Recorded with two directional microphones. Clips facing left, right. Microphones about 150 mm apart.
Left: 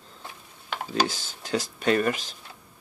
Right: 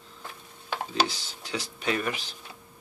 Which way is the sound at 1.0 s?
45° left (ahead or behind).